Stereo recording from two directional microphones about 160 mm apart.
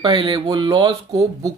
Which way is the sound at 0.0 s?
30° right (ahead or behind).